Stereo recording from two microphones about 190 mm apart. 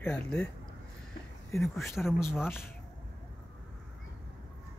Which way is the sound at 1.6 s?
Centre (ahead or behind).